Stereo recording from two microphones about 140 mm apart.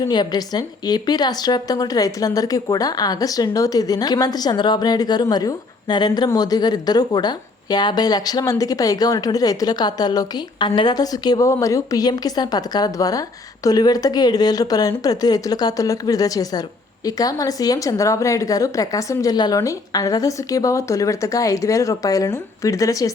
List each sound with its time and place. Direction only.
0.1 s a woman's voice: 30° left (ahead or behind)